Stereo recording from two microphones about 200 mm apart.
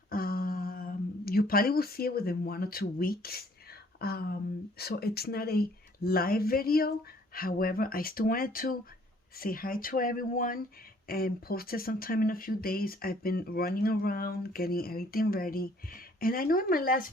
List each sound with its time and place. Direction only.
0.1 s speech: 45° left (ahead or behind)